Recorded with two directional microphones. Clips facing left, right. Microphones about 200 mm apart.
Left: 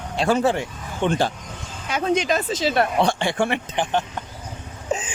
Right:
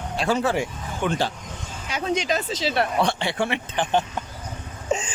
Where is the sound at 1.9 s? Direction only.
55° left (ahead or behind).